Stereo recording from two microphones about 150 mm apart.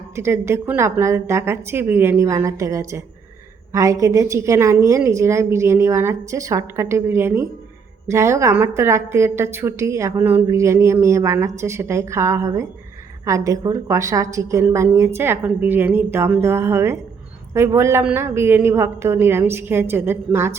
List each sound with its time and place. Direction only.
0.2 s a woman's voice: 15° right (ahead or behind)